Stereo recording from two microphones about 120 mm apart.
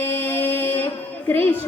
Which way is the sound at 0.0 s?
15° left (ahead or behind).